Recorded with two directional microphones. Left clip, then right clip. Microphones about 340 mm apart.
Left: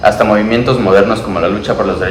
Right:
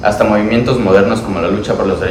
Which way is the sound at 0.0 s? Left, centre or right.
Centre.